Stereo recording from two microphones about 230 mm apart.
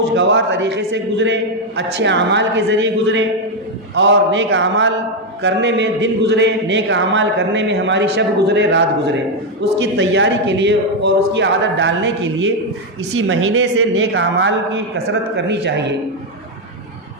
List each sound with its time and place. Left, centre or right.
0.1 s speech: right